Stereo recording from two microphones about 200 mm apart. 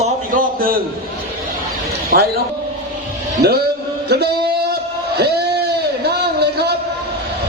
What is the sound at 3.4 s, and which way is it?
Speech, 55° right (ahead or behind).